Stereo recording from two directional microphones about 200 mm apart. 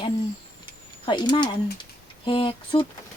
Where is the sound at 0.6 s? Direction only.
25° left (ahead or behind).